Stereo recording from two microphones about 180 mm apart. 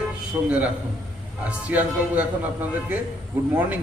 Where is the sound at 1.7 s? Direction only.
10° right (ahead or behind).